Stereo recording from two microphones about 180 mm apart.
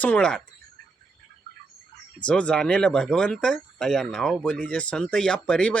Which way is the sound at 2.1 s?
5° left (ahead or behind).